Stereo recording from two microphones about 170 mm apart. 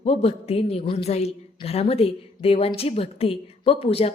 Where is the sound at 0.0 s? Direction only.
35° left (ahead or behind).